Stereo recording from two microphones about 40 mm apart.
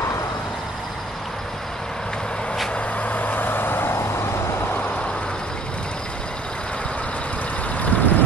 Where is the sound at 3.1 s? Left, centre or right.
Left.